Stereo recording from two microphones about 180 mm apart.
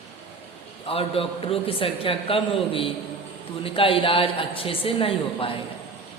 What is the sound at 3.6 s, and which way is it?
A woman's voice, 30° left (ahead or behind).